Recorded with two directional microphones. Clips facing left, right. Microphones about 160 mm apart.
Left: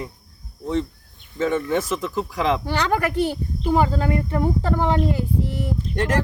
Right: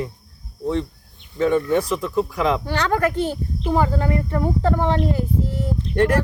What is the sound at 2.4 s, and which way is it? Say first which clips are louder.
Speech: left 3 dB; 20° left (ahead or behind).